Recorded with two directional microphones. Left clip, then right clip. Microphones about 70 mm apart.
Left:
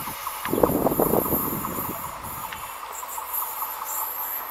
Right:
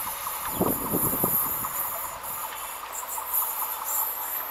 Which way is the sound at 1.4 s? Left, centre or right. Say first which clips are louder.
Left 3 dB; right.